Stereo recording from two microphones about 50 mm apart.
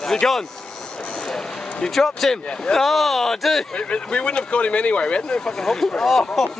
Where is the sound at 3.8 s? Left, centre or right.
Left; by 6.5 s centre.